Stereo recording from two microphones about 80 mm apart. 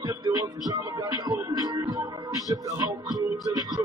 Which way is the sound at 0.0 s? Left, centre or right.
Right.